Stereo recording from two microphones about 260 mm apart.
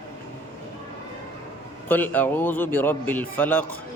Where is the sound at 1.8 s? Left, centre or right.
Centre.